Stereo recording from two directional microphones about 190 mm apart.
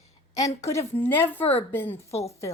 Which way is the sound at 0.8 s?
30° left (ahead or behind).